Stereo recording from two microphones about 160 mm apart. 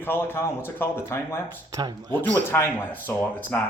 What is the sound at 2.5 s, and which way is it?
Speech, 15° left (ahead or behind).